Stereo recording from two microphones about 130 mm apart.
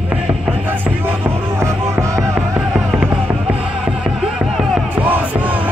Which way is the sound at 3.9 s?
5° right (ahead or behind).